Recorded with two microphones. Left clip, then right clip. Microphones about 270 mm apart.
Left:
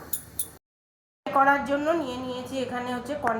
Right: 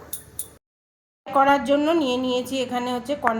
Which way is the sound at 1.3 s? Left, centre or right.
Right.